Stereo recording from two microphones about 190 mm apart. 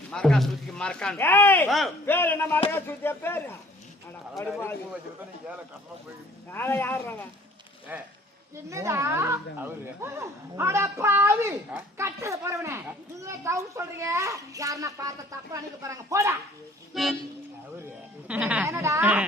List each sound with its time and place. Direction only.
0.1 s speech: 5° left (ahead or behind)
6.5 s speech: 10° left (ahead or behind)
8.7 s speech: 15° right (ahead or behind)
16.9 s speech: centre (ahead or behind)